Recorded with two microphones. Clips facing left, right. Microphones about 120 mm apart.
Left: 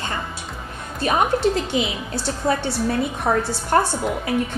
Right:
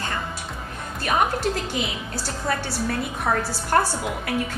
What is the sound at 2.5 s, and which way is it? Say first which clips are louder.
A woman's voice: left 5 dB; 25° left (ahead or behind).